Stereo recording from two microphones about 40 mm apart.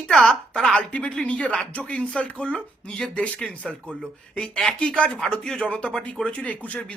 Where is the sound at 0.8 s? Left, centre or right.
Left.